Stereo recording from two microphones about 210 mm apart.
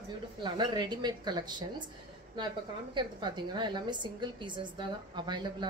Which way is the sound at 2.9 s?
20° right (ahead or behind).